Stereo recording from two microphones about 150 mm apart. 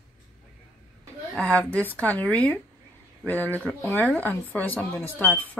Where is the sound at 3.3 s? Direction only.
15° right (ahead or behind).